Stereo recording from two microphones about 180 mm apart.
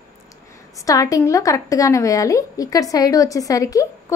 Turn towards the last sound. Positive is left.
turn(degrees=20)  # may be behind; listen again after turning